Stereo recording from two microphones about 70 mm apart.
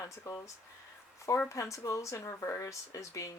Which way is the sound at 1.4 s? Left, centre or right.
Left.